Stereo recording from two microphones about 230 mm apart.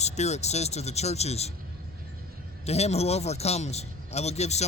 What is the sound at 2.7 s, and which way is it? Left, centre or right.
Speech, left.